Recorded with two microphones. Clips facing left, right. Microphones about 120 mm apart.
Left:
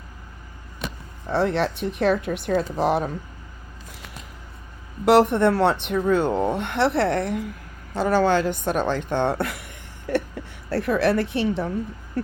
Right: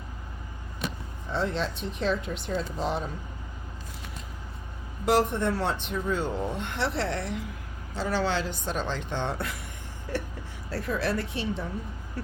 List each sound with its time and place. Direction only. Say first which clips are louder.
1.3 s speech: left 7 dB; 65° left (ahead or behind)
5.0 s a woman's voice: left 8 dB; 70° left (ahead or behind)
12.2 s speech: left 10 dB; 55° left (ahead or behind)